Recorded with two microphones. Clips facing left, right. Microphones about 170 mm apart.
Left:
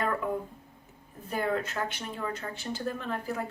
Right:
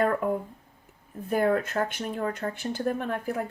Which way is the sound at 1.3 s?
50° right (ahead or behind).